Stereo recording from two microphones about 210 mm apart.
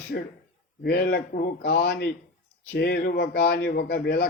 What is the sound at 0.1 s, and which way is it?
A man's voice, 45° left (ahead or behind).